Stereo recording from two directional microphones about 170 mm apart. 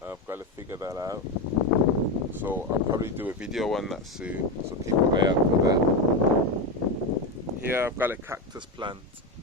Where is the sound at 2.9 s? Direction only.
15° right (ahead or behind).